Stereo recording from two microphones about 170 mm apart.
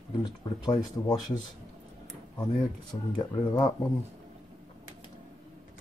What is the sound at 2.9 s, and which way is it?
Speech, 25° left (ahead or behind).